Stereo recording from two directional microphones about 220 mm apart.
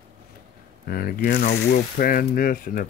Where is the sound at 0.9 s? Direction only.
40° left (ahead or behind).